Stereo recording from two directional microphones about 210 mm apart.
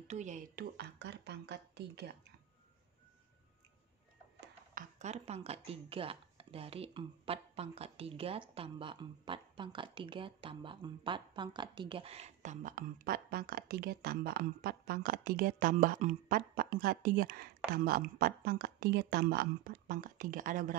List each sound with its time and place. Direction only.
0.1 s a woman's voice: 35° right (ahead or behind); by 2.1 s 50° right (ahead or behind)
4.9 s a woman's voice: 30° right (ahead or behind)